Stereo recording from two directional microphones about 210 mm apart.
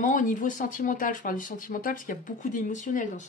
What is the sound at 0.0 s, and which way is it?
Speech, 40° left (ahead or behind).